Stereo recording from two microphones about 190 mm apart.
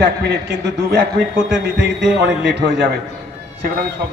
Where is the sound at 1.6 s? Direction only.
65° right (ahead or behind).